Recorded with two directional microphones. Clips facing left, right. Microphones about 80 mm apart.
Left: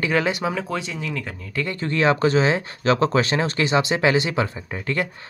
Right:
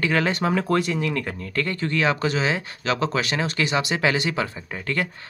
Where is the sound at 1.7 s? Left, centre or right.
Left.